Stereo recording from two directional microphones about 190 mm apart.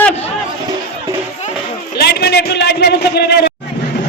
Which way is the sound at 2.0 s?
55° left (ahead or behind).